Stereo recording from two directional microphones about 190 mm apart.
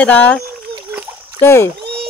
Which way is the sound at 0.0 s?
10° left (ahead or behind).